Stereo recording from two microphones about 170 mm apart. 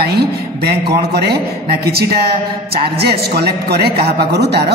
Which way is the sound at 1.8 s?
65° right (ahead or behind).